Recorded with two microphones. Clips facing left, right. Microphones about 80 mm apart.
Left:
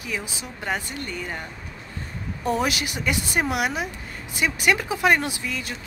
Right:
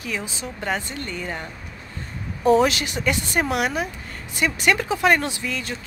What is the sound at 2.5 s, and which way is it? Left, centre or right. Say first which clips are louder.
Speech: right 7 dB; centre.